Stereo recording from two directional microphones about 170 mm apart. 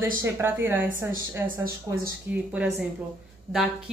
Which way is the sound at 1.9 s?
20° right (ahead or behind).